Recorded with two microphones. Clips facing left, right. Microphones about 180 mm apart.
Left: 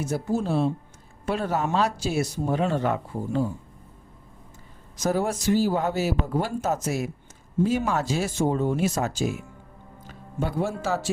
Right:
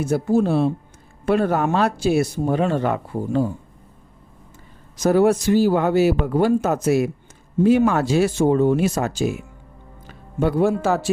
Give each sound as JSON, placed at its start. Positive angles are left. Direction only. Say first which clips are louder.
{"t": 0.0, "sound": "speech", "louder": "right 7 dB", "side_deg": -60}
{"t": 5.0, "sound": "speech", "louder": "right 8 dB", "side_deg": -65}
{"t": 10.4, "sound": "speech", "louder": "right 9 dB", "side_deg": -60}